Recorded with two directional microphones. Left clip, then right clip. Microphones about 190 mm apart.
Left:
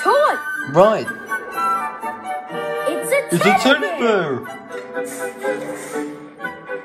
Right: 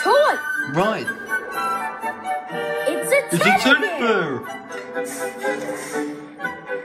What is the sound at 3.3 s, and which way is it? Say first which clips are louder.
Speech: left 2 dB; 15° left (ahead or behind).